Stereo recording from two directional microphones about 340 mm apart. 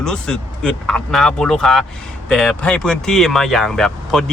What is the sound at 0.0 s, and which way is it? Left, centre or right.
Speech, centre.